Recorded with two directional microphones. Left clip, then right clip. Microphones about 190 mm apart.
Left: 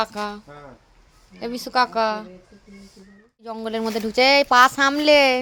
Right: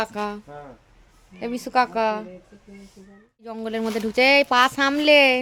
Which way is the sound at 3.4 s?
10° right (ahead or behind).